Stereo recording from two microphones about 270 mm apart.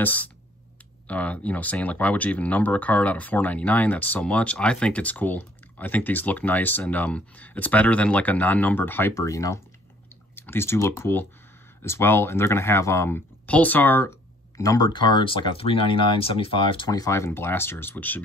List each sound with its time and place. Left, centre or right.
0.0 s speech: centre